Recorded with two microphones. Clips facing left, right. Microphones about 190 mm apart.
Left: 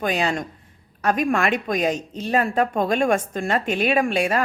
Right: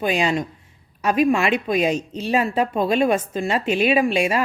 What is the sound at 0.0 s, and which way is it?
Speech, 10° right (ahead or behind).